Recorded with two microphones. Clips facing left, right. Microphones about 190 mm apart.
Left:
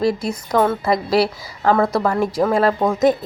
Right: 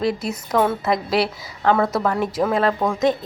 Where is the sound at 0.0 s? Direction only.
Centre (ahead or behind).